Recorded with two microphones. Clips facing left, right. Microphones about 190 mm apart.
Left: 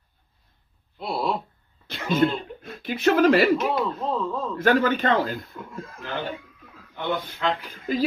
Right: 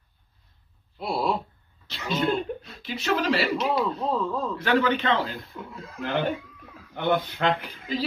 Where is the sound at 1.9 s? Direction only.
50° left (ahead or behind).